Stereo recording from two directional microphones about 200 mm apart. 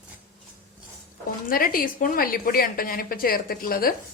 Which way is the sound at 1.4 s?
45° left (ahead or behind).